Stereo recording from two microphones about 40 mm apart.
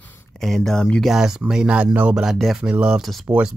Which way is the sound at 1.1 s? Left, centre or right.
Centre.